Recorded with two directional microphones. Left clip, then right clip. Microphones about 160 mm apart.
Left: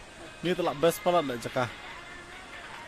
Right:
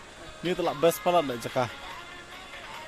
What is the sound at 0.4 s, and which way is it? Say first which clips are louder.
A man's voice: right 1 dB; centre (ahead or behind).